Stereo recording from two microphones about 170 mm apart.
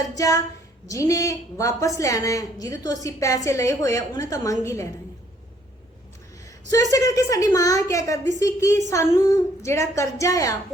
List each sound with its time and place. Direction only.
0.0 s a woman's voice: 20° left (ahead or behind)
6.9 s a woman's voice: 20° left (ahead or behind)